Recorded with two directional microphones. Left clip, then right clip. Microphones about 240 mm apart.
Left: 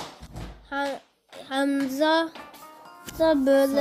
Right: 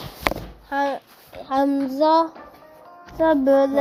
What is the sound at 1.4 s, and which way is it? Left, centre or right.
Child singing, centre.